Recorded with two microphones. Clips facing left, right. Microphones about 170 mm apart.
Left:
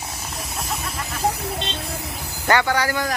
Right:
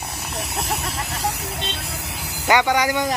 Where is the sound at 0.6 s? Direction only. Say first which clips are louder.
Right 2 dB; 70° right (ahead or behind).